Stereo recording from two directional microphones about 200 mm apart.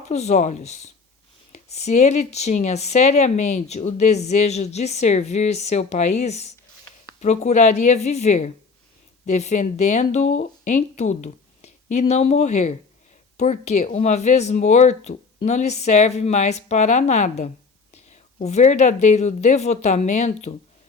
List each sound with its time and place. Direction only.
0.0 s speech: 35° left (ahead or behind)